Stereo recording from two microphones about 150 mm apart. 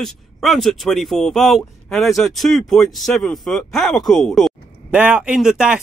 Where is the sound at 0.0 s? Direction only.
Centre (ahead or behind).